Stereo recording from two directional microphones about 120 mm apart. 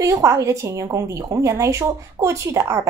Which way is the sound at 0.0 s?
25° right (ahead or behind).